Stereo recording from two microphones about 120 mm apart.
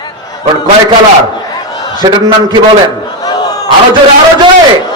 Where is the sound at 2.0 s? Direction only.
35° right (ahead or behind).